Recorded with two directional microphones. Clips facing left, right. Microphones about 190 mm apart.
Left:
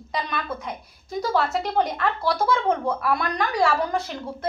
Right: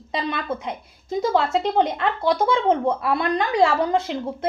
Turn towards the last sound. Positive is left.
turn(degrees=-25)  # may be behind; listen again after turning